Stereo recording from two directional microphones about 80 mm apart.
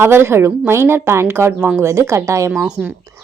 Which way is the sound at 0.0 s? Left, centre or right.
Right.